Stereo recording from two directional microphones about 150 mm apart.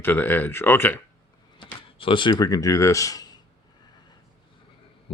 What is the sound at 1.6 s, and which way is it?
Speech, 35° left (ahead or behind).